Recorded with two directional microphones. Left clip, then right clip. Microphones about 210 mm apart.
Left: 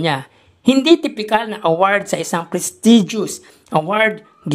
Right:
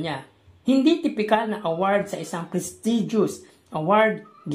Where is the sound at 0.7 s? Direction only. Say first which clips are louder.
Left 7 dB; 40° left (ahead or behind).